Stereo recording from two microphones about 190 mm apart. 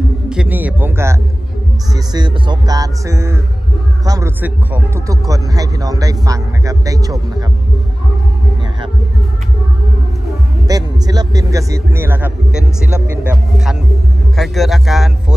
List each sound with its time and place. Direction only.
0.3 s speech: 5° right (ahead or behind)
2.0 s a man's voice: 25° right (ahead or behind)
10.7 s speech: 20° right (ahead or behind); by 15.3 s centre (ahead or behind)